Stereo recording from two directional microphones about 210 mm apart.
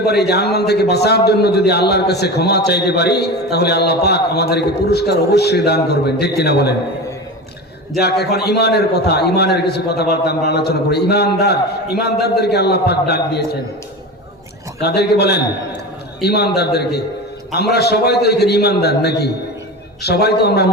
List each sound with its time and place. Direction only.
0.0 s a man's voice: 50° left (ahead or behind)
7.9 s a man's voice: 50° left (ahead or behind)
14.8 s a man's voice: 50° left (ahead or behind)